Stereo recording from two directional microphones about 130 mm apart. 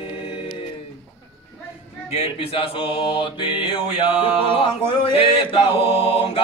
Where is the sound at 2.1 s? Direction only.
50° left (ahead or behind).